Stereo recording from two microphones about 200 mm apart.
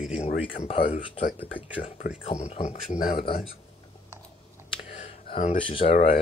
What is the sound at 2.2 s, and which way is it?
Speech, 30° left (ahead or behind).